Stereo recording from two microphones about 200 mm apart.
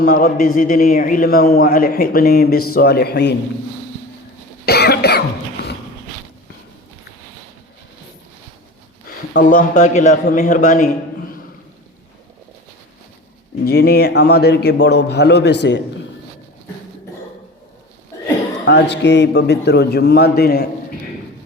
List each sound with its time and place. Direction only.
0.0 s a man's voice: 45° left (ahead or behind)
4.6 s cough: 50° left (ahead or behind)
9.0 s a man's voice: 45° left (ahead or behind)
13.7 s a man's voice: 55° left (ahead or behind)
18.6 s a man's voice: 60° left (ahead or behind)